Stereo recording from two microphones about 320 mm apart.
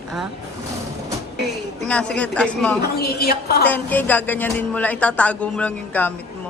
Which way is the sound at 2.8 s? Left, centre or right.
Left.